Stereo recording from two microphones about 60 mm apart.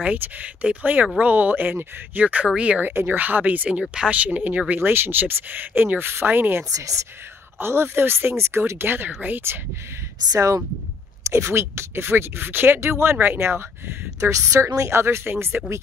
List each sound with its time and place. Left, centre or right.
0.0 s speech: right
2.2 s speech: centre
2.8 s speech: right
3.2 s speech: right
4.7 s speech: right
6.7 s speech: right
7.5 s speech: right
10.3 s speech: right
11.2 s speech: right
14.3 s speech: right